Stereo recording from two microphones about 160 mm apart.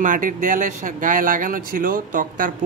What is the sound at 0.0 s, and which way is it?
Speech, 55° right (ahead or behind).